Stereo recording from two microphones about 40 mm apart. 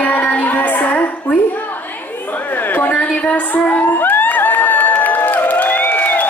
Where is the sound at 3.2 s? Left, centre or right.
Left.